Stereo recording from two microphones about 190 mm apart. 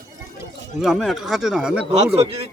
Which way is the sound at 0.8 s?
Centre (ahead or behind).